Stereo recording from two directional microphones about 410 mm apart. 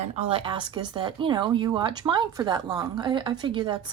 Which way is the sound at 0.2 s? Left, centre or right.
Centre.